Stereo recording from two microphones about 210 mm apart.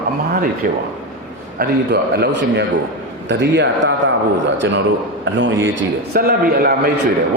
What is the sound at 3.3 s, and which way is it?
Speech, 55° right (ahead or behind).